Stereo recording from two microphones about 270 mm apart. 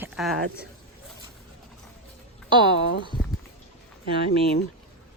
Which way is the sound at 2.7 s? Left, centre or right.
Left.